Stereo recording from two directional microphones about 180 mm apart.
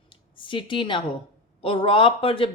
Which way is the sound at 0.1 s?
30° left (ahead or behind).